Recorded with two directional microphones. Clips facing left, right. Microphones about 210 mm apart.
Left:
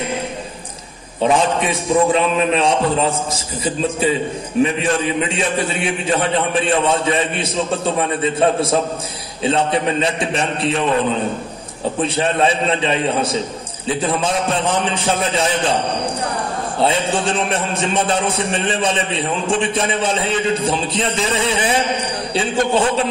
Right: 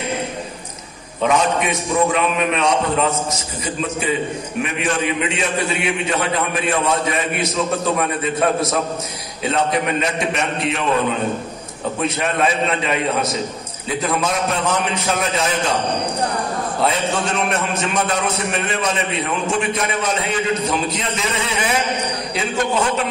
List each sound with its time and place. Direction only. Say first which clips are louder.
1.2 s a man's voice: left 2 dB; 30° left (ahead or behind)
16.8 s a man's voice: left 3 dB; 30° left (ahead or behind)